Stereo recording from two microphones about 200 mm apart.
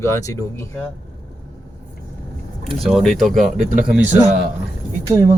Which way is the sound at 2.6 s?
Centre (ahead or behind).